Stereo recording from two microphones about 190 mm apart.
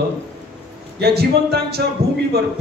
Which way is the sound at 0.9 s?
55° right (ahead or behind).